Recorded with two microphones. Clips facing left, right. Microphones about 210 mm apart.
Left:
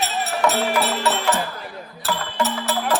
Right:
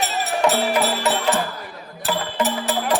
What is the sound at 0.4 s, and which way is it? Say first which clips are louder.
Music: right 1 dB; 15° right (ahead or behind).